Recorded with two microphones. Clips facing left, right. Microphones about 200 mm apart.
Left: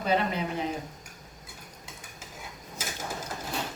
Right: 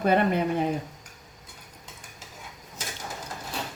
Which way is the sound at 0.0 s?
55° right (ahead or behind).